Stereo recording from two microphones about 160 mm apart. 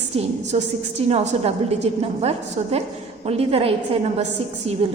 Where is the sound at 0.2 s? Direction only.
40° right (ahead or behind).